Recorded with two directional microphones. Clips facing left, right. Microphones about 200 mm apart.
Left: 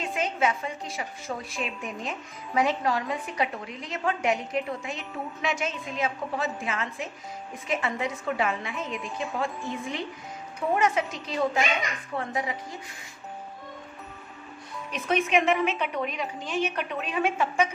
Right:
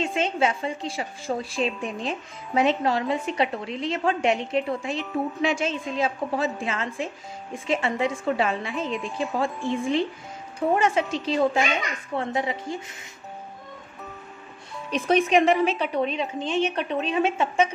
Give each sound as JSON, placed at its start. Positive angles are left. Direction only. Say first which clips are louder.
{"t": 0.0, "sound": "a woman's voice", "louder": "right 3 dB", "side_deg": -25}
{"t": 14.9, "sound": "a woman's voice", "louder": "right 5 dB", "side_deg": -35}